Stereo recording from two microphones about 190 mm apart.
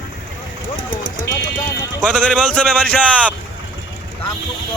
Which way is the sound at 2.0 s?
5° left (ahead or behind).